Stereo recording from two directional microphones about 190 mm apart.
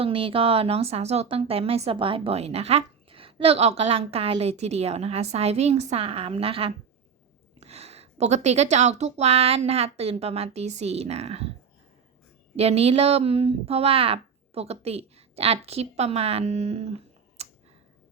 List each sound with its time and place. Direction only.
0.0 s a woman's voice: 30° right (ahead or behind)
12.5 s speech: 30° right (ahead or behind)